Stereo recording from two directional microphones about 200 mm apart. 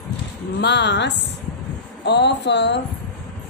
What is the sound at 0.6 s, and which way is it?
A woman's voice, 60° left (ahead or behind).